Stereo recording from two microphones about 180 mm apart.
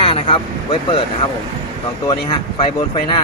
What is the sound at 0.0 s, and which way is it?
Speech, 30° left (ahead or behind).